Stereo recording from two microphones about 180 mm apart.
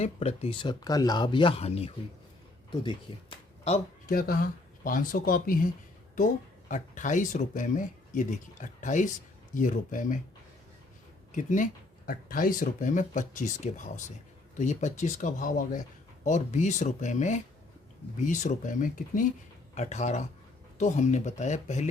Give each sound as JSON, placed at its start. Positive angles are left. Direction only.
{"t": 0.0, "sound": "speech", "side_deg": 35}
{"t": 4.1, "sound": "speech", "side_deg": 55}
{"t": 11.3, "sound": "speech", "side_deg": 45}